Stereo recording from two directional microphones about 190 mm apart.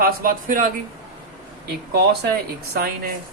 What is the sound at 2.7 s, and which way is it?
Speech, 55° right (ahead or behind).